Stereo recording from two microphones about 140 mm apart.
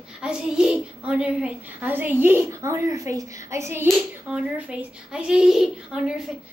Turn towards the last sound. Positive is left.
turn(degrees=-5)  # may be behind; listen again after turning